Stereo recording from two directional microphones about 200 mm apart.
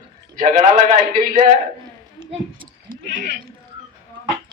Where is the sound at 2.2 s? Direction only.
20° right (ahead or behind).